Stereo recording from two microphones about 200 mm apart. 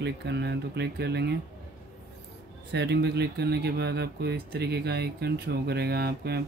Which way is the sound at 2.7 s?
60° right (ahead or behind).